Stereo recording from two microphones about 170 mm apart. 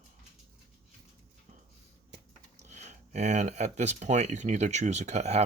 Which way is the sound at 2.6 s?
40° right (ahead or behind).